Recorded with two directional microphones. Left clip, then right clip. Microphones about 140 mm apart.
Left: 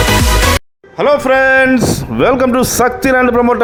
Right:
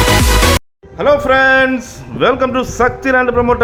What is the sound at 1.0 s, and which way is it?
Speech, 30° left (ahead or behind).